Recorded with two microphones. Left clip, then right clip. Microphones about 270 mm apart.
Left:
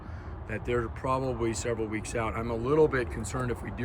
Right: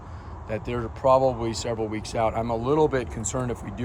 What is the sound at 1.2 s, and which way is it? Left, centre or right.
Speech, right.